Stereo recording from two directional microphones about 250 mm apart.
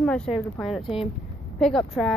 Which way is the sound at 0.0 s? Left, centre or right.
Centre.